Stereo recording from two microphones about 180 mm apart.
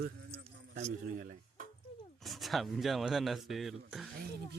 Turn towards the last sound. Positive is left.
turn(degrees=0)  # may be behind; listen again after turning